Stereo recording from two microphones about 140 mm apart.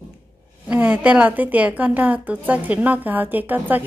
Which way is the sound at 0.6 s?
10° right (ahead or behind).